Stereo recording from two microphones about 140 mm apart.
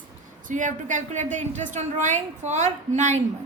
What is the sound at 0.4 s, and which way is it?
A woman's voice, 65° right (ahead or behind).